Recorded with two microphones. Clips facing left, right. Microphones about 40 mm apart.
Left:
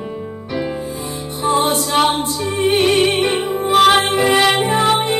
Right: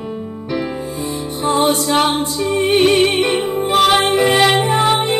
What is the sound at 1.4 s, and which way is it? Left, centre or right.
Music, right.